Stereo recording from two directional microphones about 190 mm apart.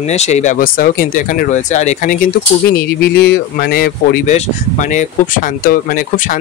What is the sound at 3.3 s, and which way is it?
Speech, 55° left (ahead or behind).